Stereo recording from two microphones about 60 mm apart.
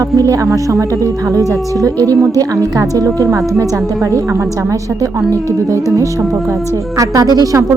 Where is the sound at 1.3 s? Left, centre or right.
Right.